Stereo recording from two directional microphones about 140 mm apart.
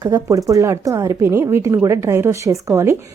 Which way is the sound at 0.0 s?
25° right (ahead or behind).